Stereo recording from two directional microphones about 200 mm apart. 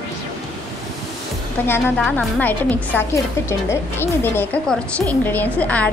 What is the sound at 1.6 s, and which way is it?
A woman's voice, 10° left (ahead or behind).